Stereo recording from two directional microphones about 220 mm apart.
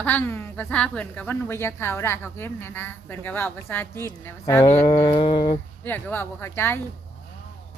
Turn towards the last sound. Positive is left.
turn(degrees=10)  # may be behind; listen again after turning